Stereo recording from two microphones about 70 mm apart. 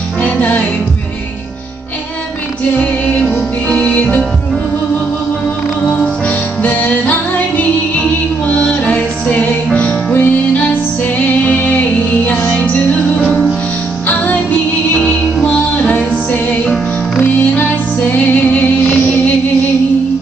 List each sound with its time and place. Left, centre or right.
0.2 s music: left
3.6 s music: centre
6.6 s music: left
14.0 s music: left
15.4 s music: centre